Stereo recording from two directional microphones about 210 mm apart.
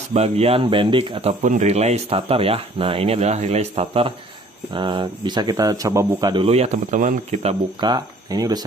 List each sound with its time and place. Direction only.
0.1 s speech: 30° right (ahead or behind)
7.8 s speech: 20° right (ahead or behind)